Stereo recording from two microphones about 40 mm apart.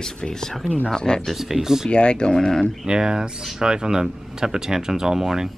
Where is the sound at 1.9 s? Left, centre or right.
Left.